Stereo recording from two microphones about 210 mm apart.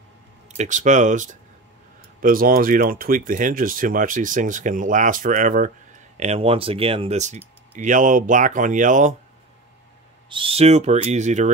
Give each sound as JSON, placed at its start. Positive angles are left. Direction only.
{"t": 0.6, "sound": "speech", "side_deg": -35}
{"t": 10.3, "sound": "speech", "side_deg": -25}